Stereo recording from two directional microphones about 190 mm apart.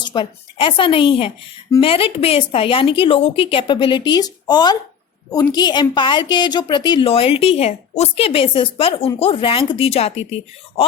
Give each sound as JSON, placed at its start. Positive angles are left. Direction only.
{"t": 0.0, "sound": "a woman's voice", "side_deg": 25}